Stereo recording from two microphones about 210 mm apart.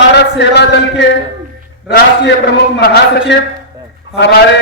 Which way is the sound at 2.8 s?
50° left (ahead or behind).